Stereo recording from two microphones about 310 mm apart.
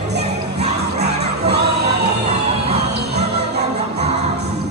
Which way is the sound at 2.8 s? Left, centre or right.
Right.